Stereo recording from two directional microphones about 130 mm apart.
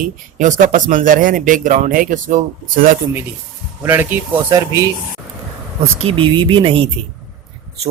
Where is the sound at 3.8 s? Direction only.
15° right (ahead or behind).